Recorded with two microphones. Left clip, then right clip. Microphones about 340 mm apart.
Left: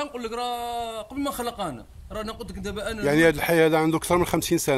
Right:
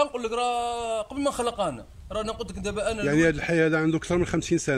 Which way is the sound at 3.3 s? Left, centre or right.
Centre.